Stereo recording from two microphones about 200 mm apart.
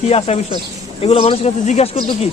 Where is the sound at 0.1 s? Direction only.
30° left (ahead or behind).